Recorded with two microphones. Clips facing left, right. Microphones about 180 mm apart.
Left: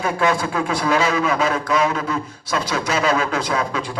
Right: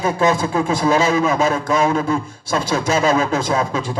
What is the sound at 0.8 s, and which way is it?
A man's voice, 45° right (ahead or behind).